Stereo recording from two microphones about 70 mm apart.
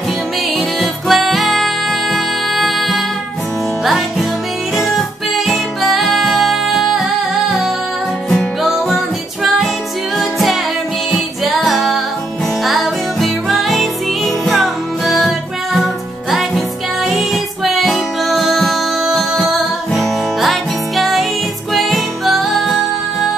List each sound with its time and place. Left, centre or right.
0.7 s music: centre
5.5 s music: centre
8.6 s music: centre